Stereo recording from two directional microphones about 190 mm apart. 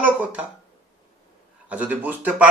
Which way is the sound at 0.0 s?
10° right (ahead or behind).